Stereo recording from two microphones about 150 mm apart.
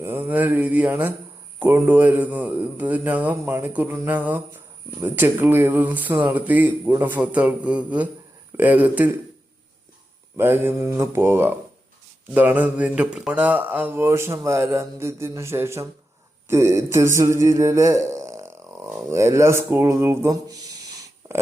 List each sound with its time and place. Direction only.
0.0 s speech: 15° right (ahead or behind)
10.3 s speech: 15° right (ahead or behind)